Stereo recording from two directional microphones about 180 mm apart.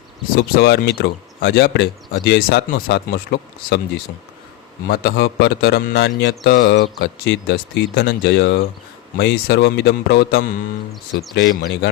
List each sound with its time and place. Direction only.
0.3 s speech: 55° left (ahead or behind)
4.9 s a man's voice: 60° left (ahead or behind)